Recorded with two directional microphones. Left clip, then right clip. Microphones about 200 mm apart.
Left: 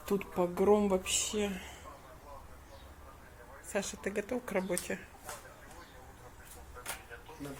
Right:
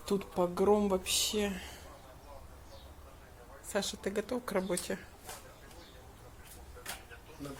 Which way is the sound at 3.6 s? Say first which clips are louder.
Right 1 dB; 15° right (ahead or behind).